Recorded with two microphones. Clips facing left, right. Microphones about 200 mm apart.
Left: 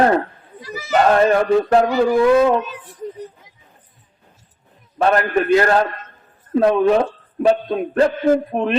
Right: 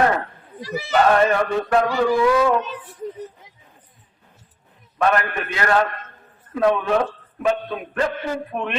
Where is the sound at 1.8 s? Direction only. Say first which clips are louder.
Left 3 dB; 25° left (ahead or behind).